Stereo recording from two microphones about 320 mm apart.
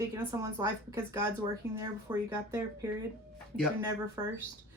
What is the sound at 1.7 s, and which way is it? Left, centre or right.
Speech, centre.